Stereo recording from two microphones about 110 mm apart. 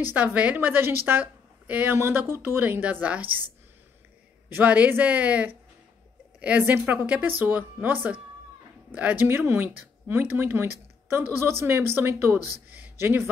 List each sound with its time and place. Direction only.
0.0 s a woman's voice: 15° right (ahead or behind)
4.5 s a woman's voice: 15° right (ahead or behind)